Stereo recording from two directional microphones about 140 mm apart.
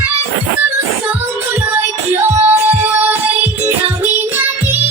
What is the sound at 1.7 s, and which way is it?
Music, 15° right (ahead or behind).